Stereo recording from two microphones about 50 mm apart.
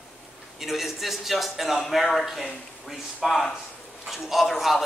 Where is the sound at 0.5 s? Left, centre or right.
Centre.